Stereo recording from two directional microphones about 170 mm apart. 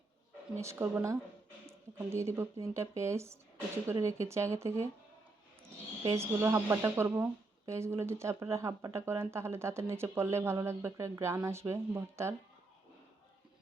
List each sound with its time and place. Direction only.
0.5 s speech: 15° right (ahead or behind)